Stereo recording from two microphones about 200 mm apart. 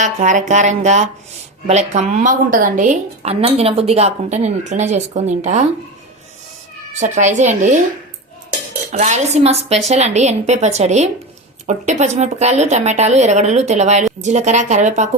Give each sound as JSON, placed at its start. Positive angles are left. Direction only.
{"t": 0.0, "sound": "speech", "side_deg": -40}
{"t": 6.9, "sound": "speech", "side_deg": -35}
{"t": 8.9, "sound": "speech", "side_deg": -35}